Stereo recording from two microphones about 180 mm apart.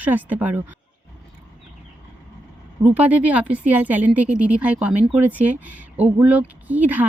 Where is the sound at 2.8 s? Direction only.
10° right (ahead or behind).